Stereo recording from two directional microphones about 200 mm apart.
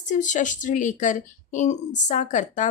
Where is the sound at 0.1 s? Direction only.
40° left (ahead or behind).